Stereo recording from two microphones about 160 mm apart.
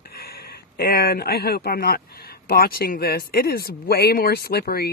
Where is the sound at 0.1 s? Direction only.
75° left (ahead or behind).